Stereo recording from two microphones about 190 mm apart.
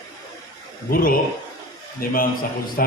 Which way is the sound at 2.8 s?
50° left (ahead or behind).